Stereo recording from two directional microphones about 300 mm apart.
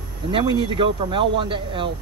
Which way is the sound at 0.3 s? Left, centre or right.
Centre.